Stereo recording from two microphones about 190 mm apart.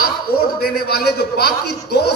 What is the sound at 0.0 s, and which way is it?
A man's voice, 50° left (ahead or behind).